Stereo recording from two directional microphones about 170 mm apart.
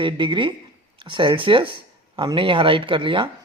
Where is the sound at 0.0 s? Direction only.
30° right (ahead or behind).